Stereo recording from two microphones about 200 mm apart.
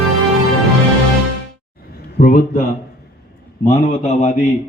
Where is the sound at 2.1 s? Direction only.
45° left (ahead or behind).